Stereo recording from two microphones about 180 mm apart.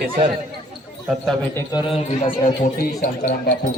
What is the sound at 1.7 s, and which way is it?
Speech, 30° left (ahead or behind).